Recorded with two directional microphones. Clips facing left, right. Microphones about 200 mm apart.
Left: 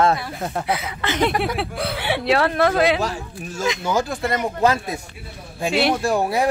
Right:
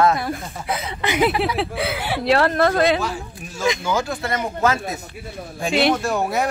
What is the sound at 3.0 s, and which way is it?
Speech, 40° left (ahead or behind).